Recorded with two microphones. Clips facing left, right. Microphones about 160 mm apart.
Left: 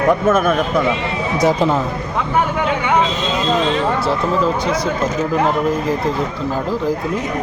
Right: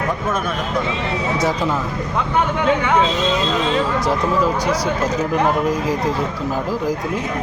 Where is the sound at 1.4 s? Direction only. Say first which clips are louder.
Left 7 dB; 20° left (ahead or behind).